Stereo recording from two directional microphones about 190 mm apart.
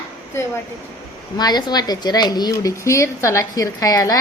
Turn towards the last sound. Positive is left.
turn(degrees=20)  # may be behind; listen again after turning